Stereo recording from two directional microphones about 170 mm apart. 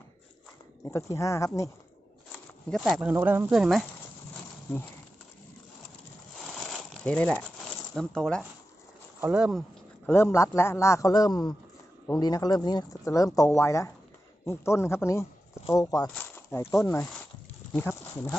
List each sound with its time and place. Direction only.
0.9 s a man's voice: 15° left (ahead or behind)
2.6 s speech: centre (ahead or behind)
3.1 s speech: 15° right (ahead or behind)
6.6 s a sound: 5° left (ahead or behind)
7.9 s speech: 5° left (ahead or behind)
10.1 s a man's voice: 15° left (ahead or behind)